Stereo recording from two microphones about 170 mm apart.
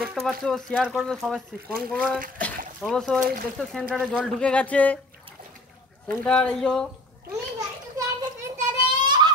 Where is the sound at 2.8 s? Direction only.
5° left (ahead or behind).